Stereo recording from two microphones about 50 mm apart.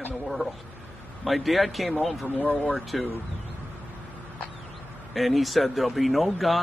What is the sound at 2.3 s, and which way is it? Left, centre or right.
Speech, left.